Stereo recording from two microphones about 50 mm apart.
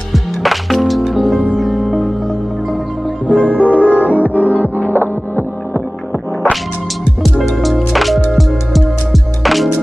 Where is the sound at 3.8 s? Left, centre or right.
Right.